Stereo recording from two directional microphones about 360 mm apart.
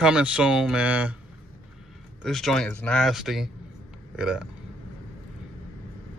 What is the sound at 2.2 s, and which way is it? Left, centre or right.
Speech, centre.